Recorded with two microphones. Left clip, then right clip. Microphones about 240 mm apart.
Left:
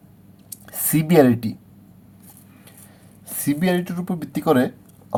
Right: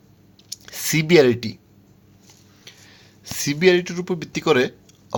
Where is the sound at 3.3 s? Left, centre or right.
Right.